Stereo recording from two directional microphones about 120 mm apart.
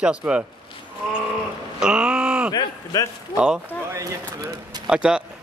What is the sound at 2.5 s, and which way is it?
Speech, 35° left (ahead or behind).